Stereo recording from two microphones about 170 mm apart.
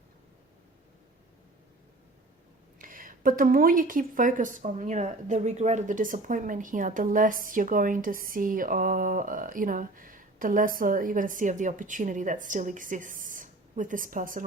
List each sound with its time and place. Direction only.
2.7 s a woman's voice: 55° right (ahead or behind)